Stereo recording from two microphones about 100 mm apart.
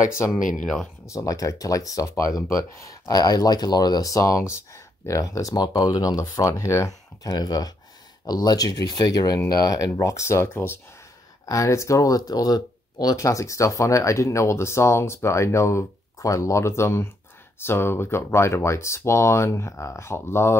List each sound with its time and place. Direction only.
0.3 s speech: centre (ahead or behind)
1.0 s speech: 35° left (ahead or behind)